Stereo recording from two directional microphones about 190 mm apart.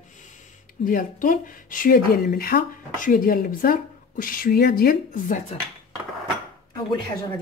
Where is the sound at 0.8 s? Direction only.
45° left (ahead or behind).